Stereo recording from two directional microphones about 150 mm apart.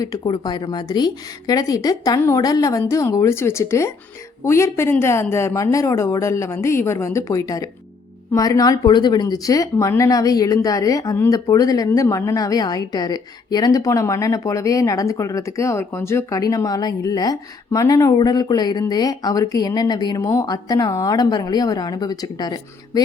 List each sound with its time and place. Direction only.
0.0 s speech: 25° left (ahead or behind)